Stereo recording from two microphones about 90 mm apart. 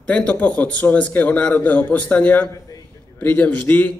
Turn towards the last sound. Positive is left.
turn(degrees=20)  # may be behind; listen again after turning